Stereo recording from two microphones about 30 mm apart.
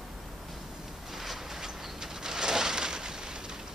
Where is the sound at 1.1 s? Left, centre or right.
Centre; by 3.5 s right.